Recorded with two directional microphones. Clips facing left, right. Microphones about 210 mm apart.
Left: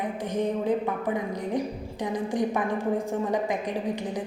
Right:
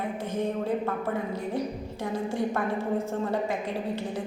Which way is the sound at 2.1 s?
15° left (ahead or behind).